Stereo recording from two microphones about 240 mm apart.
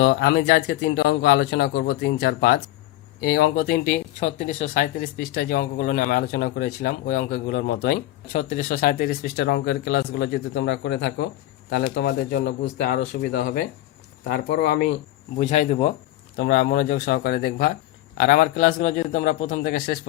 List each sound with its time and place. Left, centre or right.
0.0 s speech: left
8.3 s speech: left
15.4 s speech: left
16.4 s speech: left